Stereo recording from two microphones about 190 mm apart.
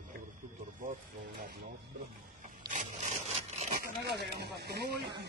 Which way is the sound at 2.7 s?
40° right (ahead or behind).